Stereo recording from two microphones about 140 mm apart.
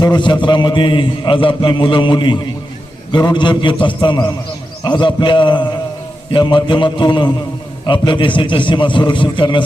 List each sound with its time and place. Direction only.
0.0 s a man's voice: 35° left (ahead or behind)